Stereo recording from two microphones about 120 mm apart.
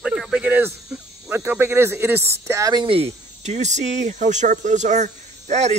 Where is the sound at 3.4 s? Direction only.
75° right (ahead or behind).